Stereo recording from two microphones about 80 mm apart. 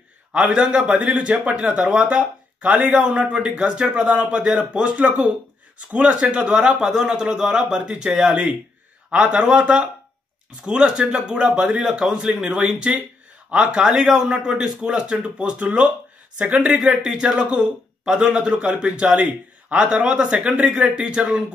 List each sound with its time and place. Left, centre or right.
0.3 s a man's voice: centre
16.7 s a man's voice: centre